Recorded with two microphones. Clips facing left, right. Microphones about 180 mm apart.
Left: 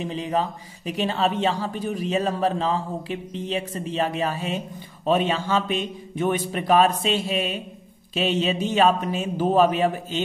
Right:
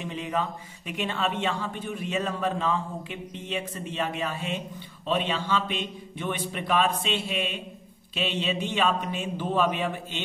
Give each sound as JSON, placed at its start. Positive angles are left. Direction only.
{"t": 0.0, "sound": "speech", "side_deg": 35}